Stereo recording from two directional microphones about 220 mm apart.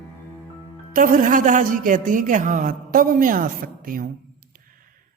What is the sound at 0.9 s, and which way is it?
A woman's voice, 40° right (ahead or behind).